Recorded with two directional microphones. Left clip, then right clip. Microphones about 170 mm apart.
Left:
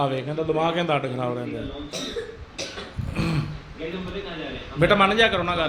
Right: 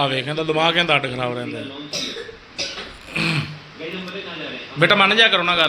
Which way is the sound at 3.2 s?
5° left (ahead or behind).